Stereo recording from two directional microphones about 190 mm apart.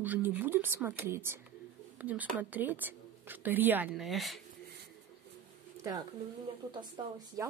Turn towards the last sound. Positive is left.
turn(degrees=-25)  # may be behind; listen again after turning